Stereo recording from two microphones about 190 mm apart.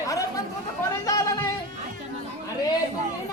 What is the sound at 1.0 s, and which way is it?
Speech, 15° left (ahead or behind).